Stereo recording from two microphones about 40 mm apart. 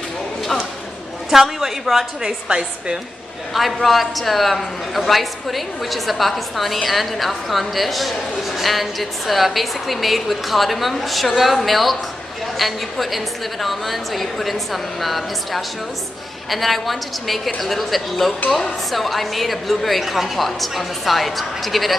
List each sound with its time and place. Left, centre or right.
1.3 s a woman's voice: centre
2.2 s a woman's voice: centre
3.5 s a man's voice: centre